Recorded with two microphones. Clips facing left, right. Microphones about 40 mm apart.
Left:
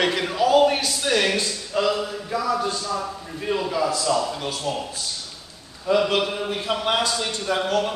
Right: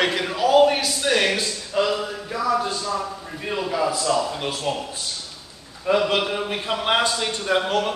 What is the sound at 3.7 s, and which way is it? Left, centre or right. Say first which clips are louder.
A man's voice: right 3 dB; centre.